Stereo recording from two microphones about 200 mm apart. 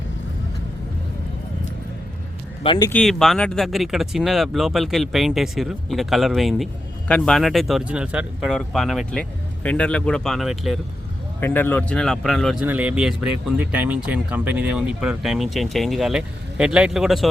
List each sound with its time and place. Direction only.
2.6 s speech: 20° left (ahead or behind)
2.9 s speech: centre (ahead or behind)
11.3 s speech: 10° left (ahead or behind)